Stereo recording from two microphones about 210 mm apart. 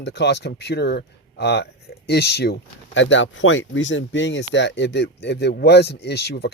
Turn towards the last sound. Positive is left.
turn(degrees=55)  # may be behind; listen again after turning